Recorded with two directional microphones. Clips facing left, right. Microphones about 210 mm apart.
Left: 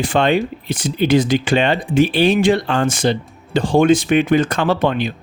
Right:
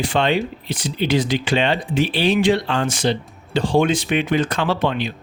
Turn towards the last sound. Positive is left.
turn(degrees=50)  # may be behind; listen again after turning